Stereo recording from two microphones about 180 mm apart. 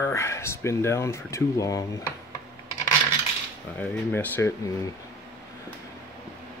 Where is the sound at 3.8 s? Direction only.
10° left (ahead or behind).